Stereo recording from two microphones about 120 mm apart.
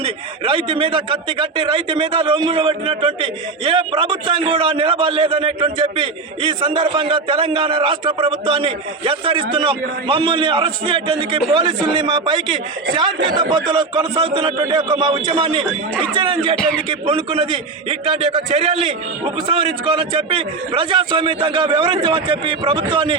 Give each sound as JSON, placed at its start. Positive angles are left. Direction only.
{"t": 0.0, "sound": "a man's voice", "side_deg": -50}
{"t": 13.3, "sound": "speech", "side_deg": -35}
{"t": 14.2, "sound": "a man's voice", "side_deg": -50}
{"t": 14.6, "sound": "speech", "side_deg": -35}
{"t": 15.1, "sound": "a man's voice", "side_deg": -50}